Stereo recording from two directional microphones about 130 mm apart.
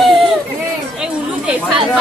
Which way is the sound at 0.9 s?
5° right (ahead or behind).